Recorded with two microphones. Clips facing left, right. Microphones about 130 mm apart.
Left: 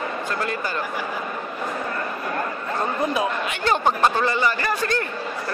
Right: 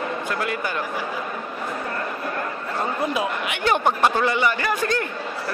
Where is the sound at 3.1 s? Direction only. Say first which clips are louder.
Left 1 dB; 15° right (ahead or behind).